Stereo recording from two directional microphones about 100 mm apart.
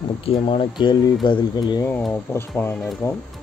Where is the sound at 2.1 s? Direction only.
25° left (ahead or behind).